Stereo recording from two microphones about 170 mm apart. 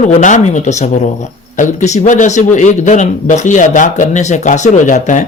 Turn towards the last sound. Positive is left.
turn(degrees=45)  # may be behind; listen again after turning